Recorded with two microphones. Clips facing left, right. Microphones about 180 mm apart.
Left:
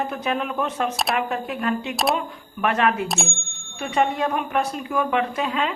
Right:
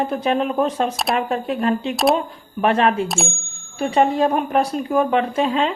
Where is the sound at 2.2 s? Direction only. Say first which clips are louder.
Right 4 dB; 30° right (ahead or behind).